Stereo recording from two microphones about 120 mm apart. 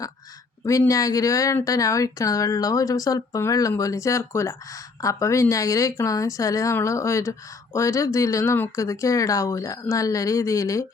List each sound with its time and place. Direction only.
0.6 s a woman's voice: 25° left (ahead or behind)